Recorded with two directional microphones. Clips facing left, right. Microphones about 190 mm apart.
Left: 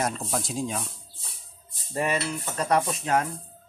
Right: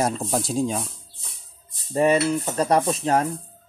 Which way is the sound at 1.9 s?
30° right (ahead or behind).